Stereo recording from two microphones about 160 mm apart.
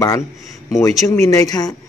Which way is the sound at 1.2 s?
20° left (ahead or behind).